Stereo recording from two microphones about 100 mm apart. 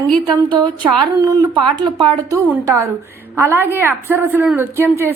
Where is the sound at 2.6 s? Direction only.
30° right (ahead or behind).